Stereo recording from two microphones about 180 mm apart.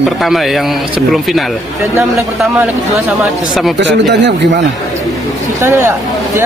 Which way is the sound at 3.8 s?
75° right (ahead or behind).